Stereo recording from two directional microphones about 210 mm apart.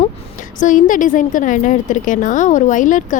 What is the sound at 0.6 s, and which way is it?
A woman's voice, 40° left (ahead or behind).